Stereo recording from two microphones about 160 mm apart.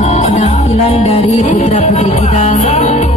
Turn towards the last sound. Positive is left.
turn(degrees=45)  # may be behind; listen again after turning